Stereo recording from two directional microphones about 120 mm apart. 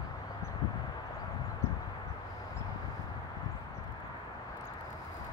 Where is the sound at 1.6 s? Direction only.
20° left (ahead or behind).